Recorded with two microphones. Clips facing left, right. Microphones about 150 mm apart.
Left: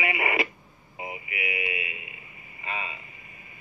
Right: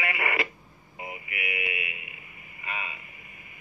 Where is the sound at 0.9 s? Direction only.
25° left (ahead or behind).